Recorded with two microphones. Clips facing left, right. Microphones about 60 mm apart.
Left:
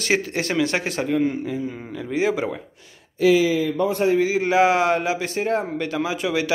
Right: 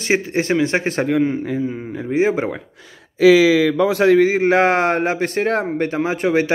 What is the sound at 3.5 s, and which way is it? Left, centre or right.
Speech, right.